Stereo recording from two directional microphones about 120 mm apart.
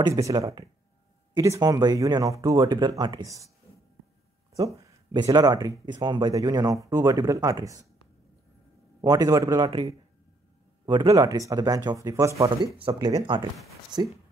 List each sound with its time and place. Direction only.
0.0 s speech: 30° right (ahead or behind)
5.1 s speech: 35° right (ahead or behind)
9.0 s speech: 30° right (ahead or behind)
13.0 s speech: 35° right (ahead or behind)